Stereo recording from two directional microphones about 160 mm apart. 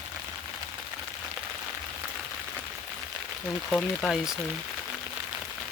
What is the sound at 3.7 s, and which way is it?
Speech, 5° left (ahead or behind).